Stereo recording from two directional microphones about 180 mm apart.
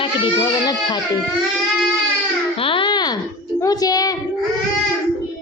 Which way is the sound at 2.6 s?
30° left (ahead or behind).